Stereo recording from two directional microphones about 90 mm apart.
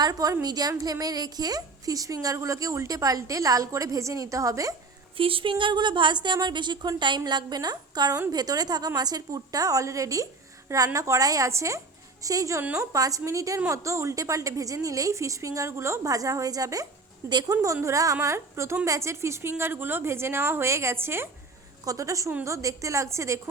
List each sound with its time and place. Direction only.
0.0 s a woman's voice: 45° right (ahead or behind)
5.1 s a woman's voice: 85° right; by 21.2 s 25° right (ahead or behind)
21.8 s a woman's voice: 40° right (ahead or behind)